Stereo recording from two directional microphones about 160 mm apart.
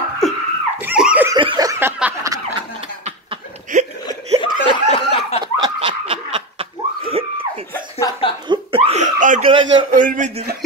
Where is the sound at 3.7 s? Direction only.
50° right (ahead or behind).